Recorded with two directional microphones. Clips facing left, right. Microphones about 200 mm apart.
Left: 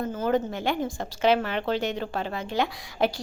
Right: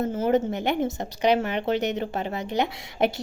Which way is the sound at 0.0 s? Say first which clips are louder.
Right 3 dB; 25° right (ahead or behind).